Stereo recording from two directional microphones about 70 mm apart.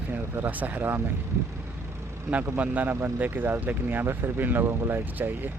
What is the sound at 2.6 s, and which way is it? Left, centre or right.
Speech, right.